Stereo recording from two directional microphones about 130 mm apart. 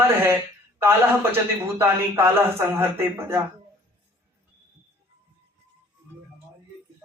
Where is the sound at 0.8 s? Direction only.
15° right (ahead or behind).